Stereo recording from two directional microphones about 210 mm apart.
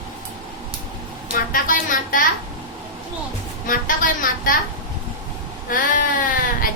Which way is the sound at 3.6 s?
40° left (ahead or behind).